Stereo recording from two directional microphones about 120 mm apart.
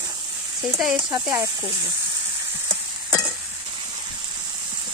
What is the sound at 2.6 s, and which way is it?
Stir, 20° right (ahead or behind).